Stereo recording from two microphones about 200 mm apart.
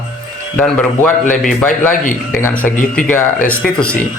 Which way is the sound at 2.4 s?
10° left (ahead or behind).